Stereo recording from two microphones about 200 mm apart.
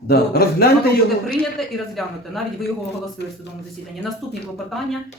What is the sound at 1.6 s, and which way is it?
Speech, centre (ahead or behind).